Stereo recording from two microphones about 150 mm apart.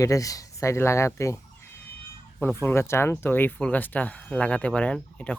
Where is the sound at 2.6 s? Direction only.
15° left (ahead or behind).